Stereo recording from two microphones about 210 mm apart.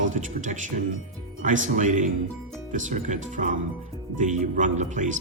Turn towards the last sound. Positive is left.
turn(degrees=-35)  # may be behind; listen again after turning